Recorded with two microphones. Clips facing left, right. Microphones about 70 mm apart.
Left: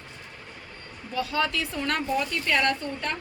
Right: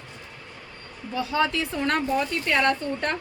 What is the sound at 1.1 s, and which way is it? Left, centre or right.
Speech, right.